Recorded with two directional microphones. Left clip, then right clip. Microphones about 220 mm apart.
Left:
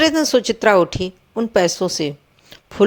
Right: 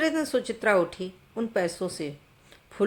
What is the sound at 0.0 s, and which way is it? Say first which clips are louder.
A woman's voice: left 11 dB; 35° left (ahead or behind).